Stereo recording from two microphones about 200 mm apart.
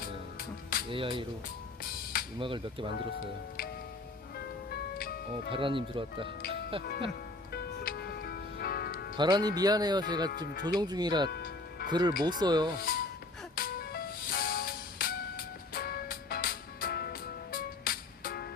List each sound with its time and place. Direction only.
0.9 s speech: 25° right (ahead or behind)
2.4 s speech: 25° right (ahead or behind)
4.4 s music: 50° left (ahead or behind)
5.5 s speech: 25° right (ahead or behind)
6.5 s music: 25° right (ahead or behind)
7.5 s music: 50° left (ahead or behind)
9.1 s speech: 20° right (ahead or behind)
10.3 s speech: 45° left (ahead or behind)
10.8 s speech: 20° right (ahead or behind)
11.3 s music: 50° left (ahead or behind)
11.9 s speech: 20° right (ahead or behind)
12.7 s speech: 45° left (ahead or behind)
13.6 s music: 45° left (ahead or behind)